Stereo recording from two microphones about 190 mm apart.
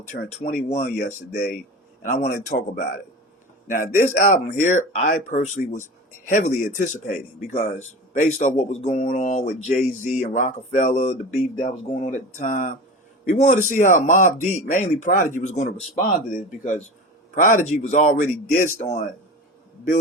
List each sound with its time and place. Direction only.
0.1 s speech: 40° left (ahead or behind)